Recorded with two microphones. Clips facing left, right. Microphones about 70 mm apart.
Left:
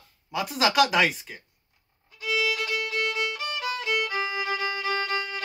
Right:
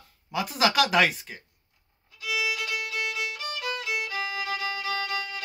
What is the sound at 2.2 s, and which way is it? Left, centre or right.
Violin, left.